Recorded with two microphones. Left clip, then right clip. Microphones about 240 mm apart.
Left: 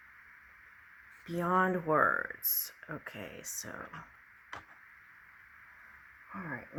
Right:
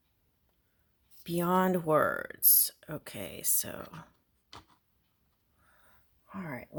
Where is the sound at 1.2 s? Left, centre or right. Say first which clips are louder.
Right 1 dB; right.